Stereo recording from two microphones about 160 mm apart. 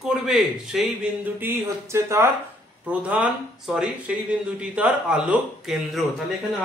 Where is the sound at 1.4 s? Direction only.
15° right (ahead or behind).